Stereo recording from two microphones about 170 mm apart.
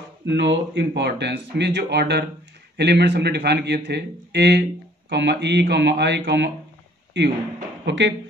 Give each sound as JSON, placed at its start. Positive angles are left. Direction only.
{"t": 0.2, "sound": "speech", "side_deg": -90}
{"t": 5.1, "sound": "speech", "side_deg": -90}
{"t": 7.8, "sound": "speech", "side_deg": -90}